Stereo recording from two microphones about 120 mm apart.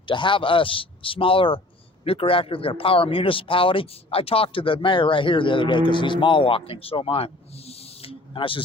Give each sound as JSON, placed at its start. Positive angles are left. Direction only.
{"t": 0.0, "sound": "speech", "side_deg": 45}